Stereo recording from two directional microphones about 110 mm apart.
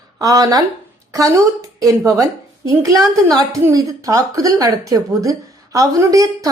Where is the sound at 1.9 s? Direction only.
30° right (ahead or behind).